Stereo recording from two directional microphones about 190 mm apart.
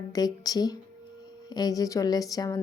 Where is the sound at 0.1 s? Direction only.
20° left (ahead or behind).